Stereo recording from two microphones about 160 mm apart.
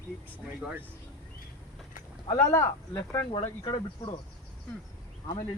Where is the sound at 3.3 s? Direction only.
35° left (ahead or behind).